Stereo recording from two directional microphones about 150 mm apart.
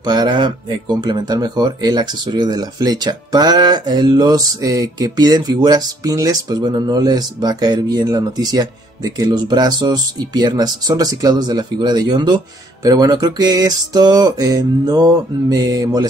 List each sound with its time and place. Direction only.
0.0 s speech: 25° right (ahead or behind)